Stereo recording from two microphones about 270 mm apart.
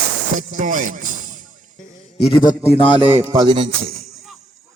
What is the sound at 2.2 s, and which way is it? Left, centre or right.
Speech, centre.